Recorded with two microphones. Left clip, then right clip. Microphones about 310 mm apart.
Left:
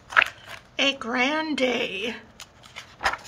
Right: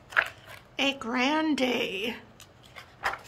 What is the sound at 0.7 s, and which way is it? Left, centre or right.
A woman's voice, centre.